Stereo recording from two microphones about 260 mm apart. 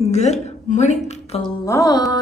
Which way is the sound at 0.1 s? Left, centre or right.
Left.